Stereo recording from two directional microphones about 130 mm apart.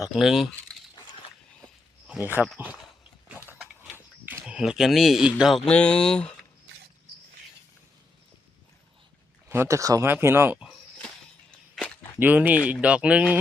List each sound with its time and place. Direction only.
0.2 s speech: 5° right (ahead or behind)
2.0 s speech: 15° right (ahead or behind)
4.4 s speech: 5° right (ahead or behind)
9.5 s speech: 20° right (ahead or behind)
11.8 s walk: centre (ahead or behind)
12.2 s speech: 10° right (ahead or behind)